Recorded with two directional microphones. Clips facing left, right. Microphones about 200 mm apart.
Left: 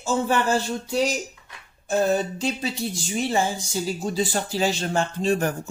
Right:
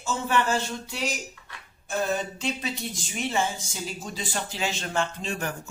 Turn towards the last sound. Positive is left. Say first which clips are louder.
# left 9 dB
turn(degrees=40)  # may be behind; listen again after turning